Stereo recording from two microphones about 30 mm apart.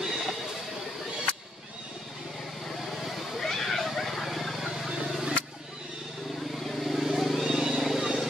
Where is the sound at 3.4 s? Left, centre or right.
Centre.